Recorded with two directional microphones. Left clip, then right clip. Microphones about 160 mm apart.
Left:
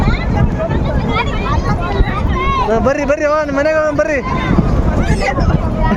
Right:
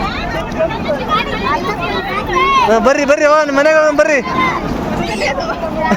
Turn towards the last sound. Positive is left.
turn(degrees=5)  # may be behind; listen again after turning